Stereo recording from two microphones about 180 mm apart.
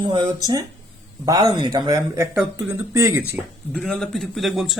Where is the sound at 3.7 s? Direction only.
5° left (ahead or behind).